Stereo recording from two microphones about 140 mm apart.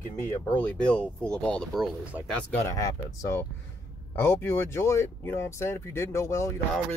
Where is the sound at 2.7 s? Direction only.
20° left (ahead or behind).